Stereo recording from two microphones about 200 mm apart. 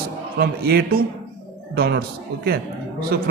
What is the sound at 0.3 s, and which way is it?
A man's voice, 50° right (ahead or behind).